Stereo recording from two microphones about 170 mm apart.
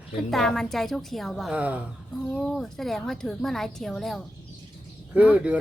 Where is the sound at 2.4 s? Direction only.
Centre (ahead or behind).